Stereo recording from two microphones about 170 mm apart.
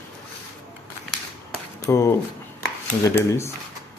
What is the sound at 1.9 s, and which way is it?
Speech, 15° left (ahead or behind).